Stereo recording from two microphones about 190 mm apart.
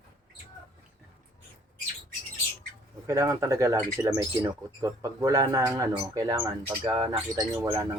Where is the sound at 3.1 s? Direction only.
15° right (ahead or behind).